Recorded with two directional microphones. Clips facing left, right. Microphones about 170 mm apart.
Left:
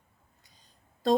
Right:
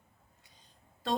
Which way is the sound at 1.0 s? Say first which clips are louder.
Left 8 dB; 35° left (ahead or behind).